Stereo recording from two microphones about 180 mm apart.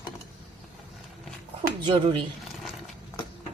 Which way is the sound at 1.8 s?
30° right (ahead or behind).